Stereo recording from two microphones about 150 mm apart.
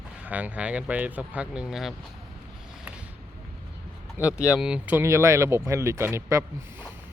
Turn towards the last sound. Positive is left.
turn(degrees=-20)  # may be behind; listen again after turning